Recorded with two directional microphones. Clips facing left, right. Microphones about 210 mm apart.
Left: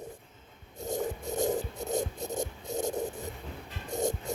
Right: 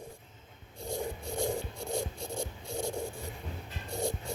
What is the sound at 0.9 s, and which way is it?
Scrape, 45° left (ahead or behind).